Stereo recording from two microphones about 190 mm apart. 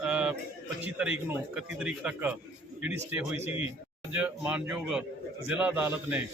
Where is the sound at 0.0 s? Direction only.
5° right (ahead or behind).